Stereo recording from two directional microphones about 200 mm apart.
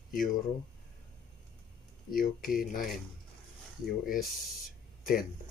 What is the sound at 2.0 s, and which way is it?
Speech, 45° left (ahead or behind).